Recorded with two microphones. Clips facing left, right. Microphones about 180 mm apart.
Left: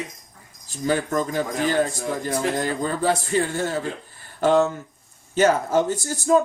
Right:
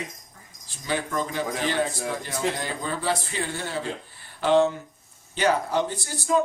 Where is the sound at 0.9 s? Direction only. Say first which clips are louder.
Left 5 dB; 45° left (ahead or behind).